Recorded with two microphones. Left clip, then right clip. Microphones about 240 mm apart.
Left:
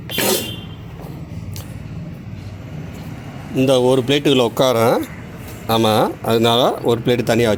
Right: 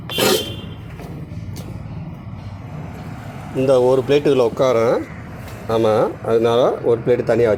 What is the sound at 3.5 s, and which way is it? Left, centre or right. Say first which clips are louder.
Speech: even; left.